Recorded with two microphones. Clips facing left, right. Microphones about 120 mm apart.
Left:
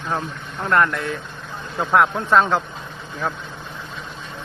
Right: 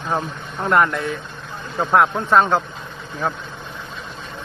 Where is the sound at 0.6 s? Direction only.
10° right (ahead or behind).